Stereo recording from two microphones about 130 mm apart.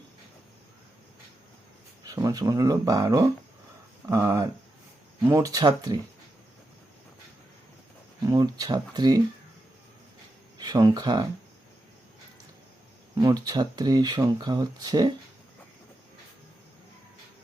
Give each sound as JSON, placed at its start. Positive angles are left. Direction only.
{"t": 2.0, "sound": "speech", "side_deg": -30}
{"t": 8.2, "sound": "speech", "side_deg": -30}
{"t": 10.6, "sound": "speech", "side_deg": -30}
{"t": 13.1, "sound": "speech", "side_deg": -30}